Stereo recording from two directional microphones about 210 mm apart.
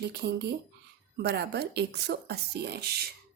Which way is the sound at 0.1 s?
50° right (ahead or behind).